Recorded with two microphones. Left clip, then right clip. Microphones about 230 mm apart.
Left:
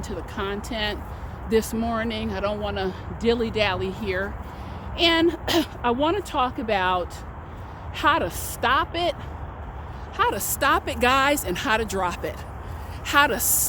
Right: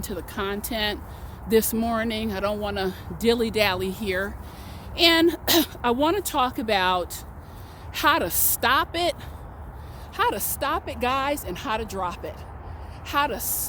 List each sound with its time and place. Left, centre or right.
0.1 s speech: right
10.2 s speech: right
10.6 s speech: centre